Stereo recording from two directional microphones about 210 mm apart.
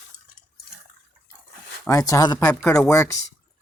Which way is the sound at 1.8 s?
15° left (ahead or behind).